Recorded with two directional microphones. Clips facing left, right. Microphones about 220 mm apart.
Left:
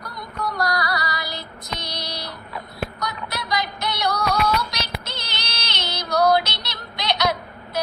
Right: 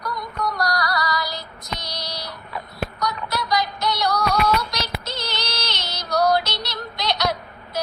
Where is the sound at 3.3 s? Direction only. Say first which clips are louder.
Right 3 dB; 55° left (ahead or behind).